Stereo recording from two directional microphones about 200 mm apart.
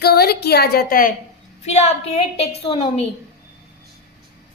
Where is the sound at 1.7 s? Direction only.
35° left (ahead or behind).